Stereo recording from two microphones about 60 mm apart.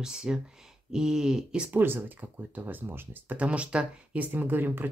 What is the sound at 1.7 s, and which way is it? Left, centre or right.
Speech, right.